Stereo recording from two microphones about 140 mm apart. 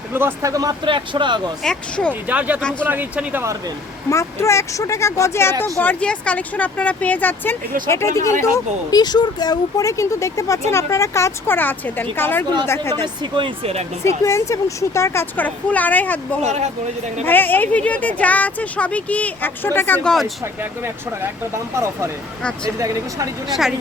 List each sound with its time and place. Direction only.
0.1 s speech: 15° right (ahead or behind); by 1.5 s 35° right (ahead or behind)
1.6 s speech: 5° left (ahead or behind)
2.2 s speech: 10° right (ahead or behind)
2.6 s speech: 5° left (ahead or behind)
2.8 s speech: 15° right (ahead or behind)
4.1 s speech: 20° left (ahead or behind)
13.3 s speech: 40° right (ahead or behind)
14.3 s speech: 20° left (ahead or behind)
16.4 s speech: 50° right (ahead or behind)
17.2 s speech: 15° left (ahead or behind)
20.1 s speech: centre (ahead or behind)
20.4 s speech: 15° right (ahead or behind)
23.5 s speech: centre (ahead or behind)